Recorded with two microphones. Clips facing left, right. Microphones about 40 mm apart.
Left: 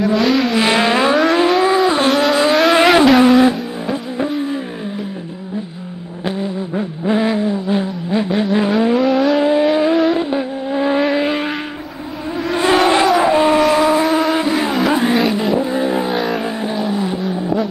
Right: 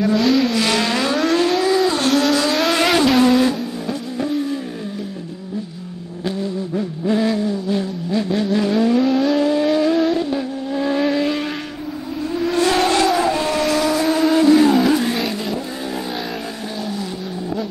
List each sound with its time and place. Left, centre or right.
0.0 s vehicle: centre
0.5 s vehicle: left
6.2 s vehicle: left
9.0 s vehicle: centre
9.4 s vehicle: left
12.5 s vehicle: left